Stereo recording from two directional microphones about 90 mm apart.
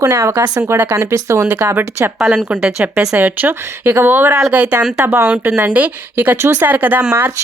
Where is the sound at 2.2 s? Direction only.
10° right (ahead or behind).